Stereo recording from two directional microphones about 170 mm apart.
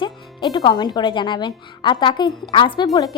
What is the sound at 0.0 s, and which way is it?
Speech, 25° left (ahead or behind).